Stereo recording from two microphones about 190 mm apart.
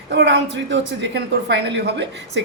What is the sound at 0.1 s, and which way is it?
A woman's voice, 65° right (ahead or behind).